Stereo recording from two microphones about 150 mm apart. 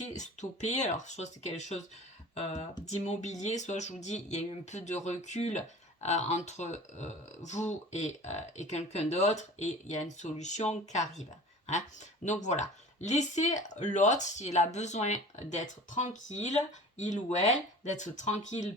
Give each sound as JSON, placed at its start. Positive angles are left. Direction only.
{"t": 0.1, "sound": "speech", "side_deg": 50}
{"t": 12.2, "sound": "speech", "side_deg": 50}